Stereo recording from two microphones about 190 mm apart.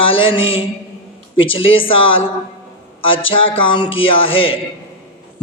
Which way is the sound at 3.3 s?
25° left (ahead or behind).